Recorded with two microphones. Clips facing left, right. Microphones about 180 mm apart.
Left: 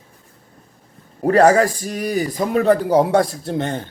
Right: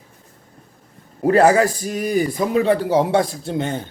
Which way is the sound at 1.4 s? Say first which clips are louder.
Left 2 dB; 40° left (ahead or behind).